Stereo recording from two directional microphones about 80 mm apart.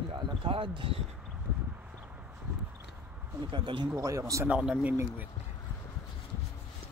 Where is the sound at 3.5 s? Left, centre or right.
Right.